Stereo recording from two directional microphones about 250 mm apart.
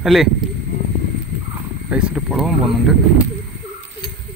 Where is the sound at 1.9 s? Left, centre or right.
Centre.